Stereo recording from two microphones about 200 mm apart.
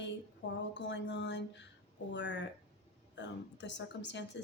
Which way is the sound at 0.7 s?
60° left (ahead or behind).